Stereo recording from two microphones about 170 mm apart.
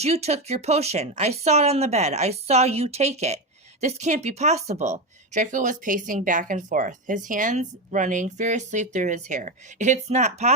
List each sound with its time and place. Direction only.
0.0 s speech: 40° right (ahead or behind)